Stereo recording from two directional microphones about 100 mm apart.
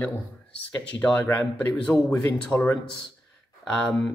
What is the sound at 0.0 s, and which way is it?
Speech, 20° left (ahead or behind).